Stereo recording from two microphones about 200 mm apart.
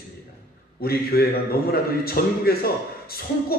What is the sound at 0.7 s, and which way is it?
A man's voice, 50° left (ahead or behind).